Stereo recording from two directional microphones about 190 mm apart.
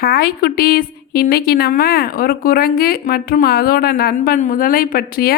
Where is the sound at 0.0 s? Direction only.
55° left (ahead or behind).